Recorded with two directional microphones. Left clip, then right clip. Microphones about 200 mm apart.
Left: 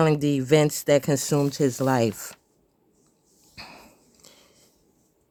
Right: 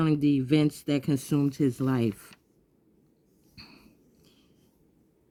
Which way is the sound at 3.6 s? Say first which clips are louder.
Left 8 dB; 20° left (ahead or behind).